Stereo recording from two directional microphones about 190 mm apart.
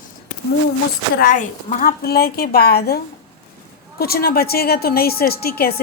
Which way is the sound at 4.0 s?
55° left (ahead or behind).